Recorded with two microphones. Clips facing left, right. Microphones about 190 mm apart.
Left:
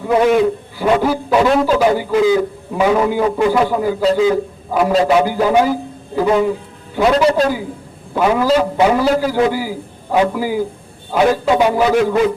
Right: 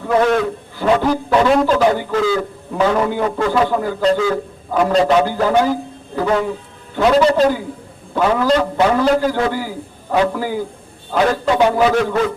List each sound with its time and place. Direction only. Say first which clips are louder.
0.0 s a man's voice: left 3 dB; 10° left (ahead or behind)
4.8 s a man's voice: left 1 dB; 5° left (ahead or behind)